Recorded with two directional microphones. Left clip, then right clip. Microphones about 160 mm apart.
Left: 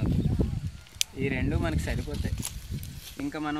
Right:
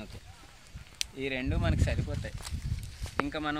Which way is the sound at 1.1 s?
30° right (ahead or behind).